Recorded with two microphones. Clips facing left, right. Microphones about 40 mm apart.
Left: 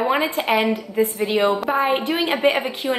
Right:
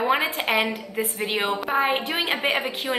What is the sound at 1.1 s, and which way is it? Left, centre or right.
Speech, right.